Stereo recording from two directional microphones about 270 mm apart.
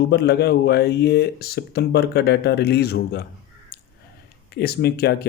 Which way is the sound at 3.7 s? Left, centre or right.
Left.